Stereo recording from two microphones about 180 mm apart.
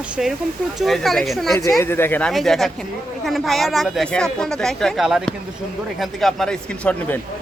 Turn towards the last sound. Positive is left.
turn(degrees=5)  # may be behind; listen again after turning